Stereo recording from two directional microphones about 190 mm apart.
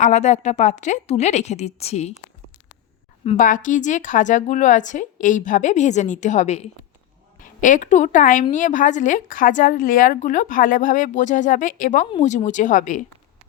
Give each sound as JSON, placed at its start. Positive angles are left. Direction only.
{"t": 0.0, "sound": "a woman's voice", "side_deg": 40}
{"t": 3.3, "sound": "a woman's voice", "side_deg": 45}